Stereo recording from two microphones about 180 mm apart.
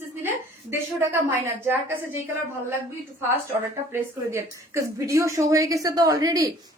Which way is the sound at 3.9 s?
15° right (ahead or behind).